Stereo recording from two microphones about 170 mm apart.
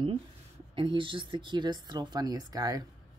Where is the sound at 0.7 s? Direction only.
30° right (ahead or behind).